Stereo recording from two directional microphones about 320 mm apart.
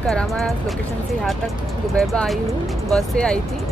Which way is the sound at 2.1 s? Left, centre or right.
Centre.